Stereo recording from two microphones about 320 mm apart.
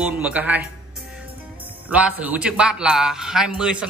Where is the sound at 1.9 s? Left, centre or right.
Centre.